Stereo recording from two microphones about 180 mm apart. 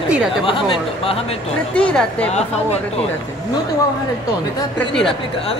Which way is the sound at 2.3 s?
35° left (ahead or behind).